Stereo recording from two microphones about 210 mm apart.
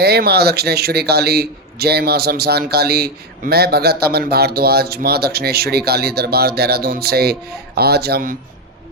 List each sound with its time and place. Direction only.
0.0 s a man's voice: 50° right (ahead or behind)